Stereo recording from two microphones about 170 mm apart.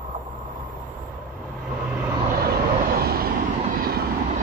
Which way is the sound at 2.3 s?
60° right (ahead or behind).